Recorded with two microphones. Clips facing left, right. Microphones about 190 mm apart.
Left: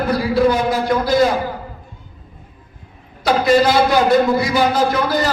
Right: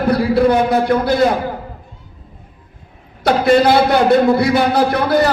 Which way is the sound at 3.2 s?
60° right (ahead or behind).